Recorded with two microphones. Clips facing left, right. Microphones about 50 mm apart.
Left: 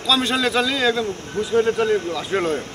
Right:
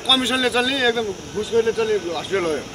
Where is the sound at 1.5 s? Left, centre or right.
Left.